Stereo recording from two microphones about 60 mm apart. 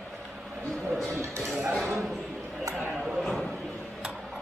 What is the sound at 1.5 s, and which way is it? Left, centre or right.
Speech, right.